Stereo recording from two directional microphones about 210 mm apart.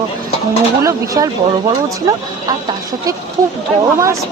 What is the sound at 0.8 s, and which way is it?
Speech, 15° right (ahead or behind).